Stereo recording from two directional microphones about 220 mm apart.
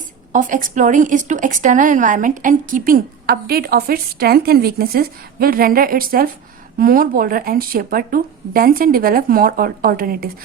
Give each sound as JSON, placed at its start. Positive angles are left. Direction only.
{"t": 0.3, "sound": "a woman's voice", "side_deg": -35}